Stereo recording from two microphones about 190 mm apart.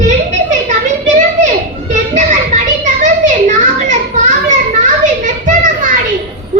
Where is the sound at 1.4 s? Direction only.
40° right (ahead or behind).